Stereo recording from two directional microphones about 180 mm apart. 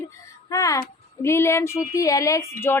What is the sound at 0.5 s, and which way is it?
Speech, 20° left (ahead or behind).